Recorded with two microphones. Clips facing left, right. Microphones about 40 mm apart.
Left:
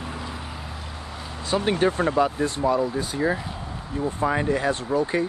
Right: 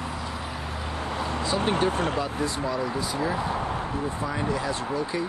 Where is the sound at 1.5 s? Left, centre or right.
Left.